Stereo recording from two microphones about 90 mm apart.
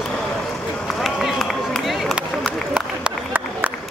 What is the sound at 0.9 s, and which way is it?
Run, centre (ahead or behind).